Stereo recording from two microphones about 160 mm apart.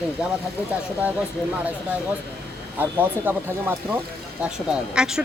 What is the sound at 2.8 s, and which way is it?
Speech, 10° right (ahead or behind).